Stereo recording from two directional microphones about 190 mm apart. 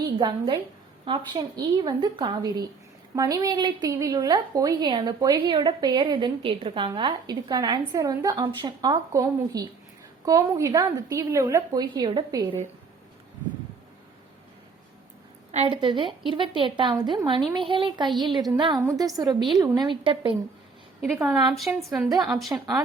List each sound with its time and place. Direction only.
0.2 s a woman's voice: 25° right (ahead or behind)
15.5 s a woman's voice: 25° right (ahead or behind)
21.0 s a woman's voice: 5° right (ahead or behind)